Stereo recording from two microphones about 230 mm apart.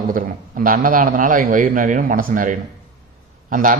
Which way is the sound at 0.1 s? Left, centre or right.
Right.